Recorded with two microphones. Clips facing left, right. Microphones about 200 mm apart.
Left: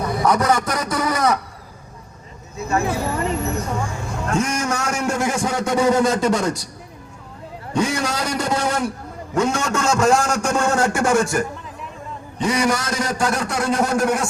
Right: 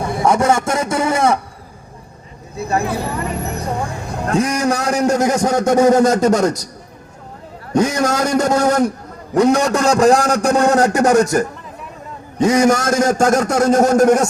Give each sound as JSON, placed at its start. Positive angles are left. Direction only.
{"t": 0.0, "sound": "speech", "side_deg": -25}
{"t": 2.6, "sound": "a man's voice", "side_deg": -35}
{"t": 7.7, "sound": "a man's voice", "side_deg": -40}